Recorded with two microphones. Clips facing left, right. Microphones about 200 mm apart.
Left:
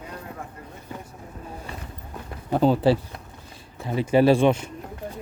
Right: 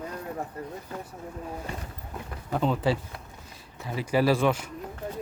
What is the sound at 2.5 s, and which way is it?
Speech, 35° left (ahead or behind).